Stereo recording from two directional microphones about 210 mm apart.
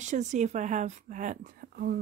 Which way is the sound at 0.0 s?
35° right (ahead or behind).